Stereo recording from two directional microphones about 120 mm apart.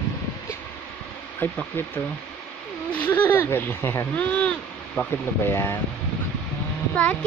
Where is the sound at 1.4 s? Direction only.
15° left (ahead or behind).